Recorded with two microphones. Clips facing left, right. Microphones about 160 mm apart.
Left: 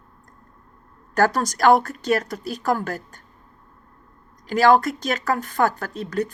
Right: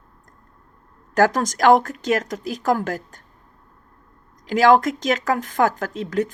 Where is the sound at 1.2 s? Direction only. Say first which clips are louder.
Right 1 dB; 45° right (ahead or behind).